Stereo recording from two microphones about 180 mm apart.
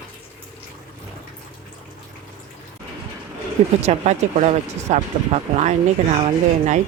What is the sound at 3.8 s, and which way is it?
Speech, 40° right (ahead or behind).